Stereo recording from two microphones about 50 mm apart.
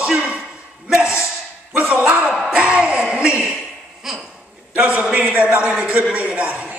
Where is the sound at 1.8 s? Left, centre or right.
Right.